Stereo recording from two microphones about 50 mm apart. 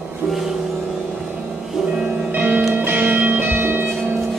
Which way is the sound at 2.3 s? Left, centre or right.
Right.